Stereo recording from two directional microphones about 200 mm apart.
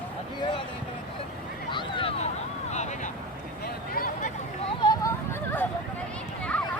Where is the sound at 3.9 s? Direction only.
45° left (ahead or behind).